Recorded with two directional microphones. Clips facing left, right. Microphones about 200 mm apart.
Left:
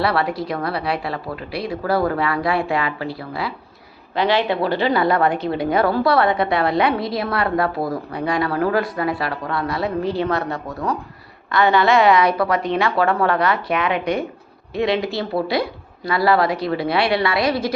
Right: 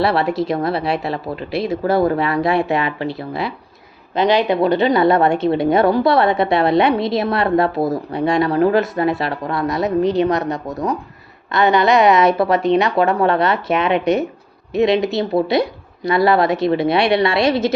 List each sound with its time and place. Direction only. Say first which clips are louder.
0.0 s a woman's voice: right 3 dB; 25° right (ahead or behind)